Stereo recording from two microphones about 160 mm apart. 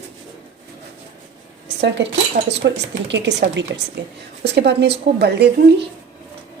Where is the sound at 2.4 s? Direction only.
90° right.